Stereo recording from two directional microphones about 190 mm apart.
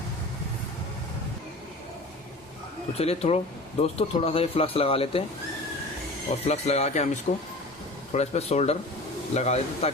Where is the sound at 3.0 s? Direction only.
30° left (ahead or behind).